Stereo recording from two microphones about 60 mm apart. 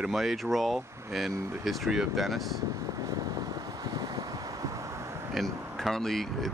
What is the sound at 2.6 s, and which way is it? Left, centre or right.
Vehicle, right.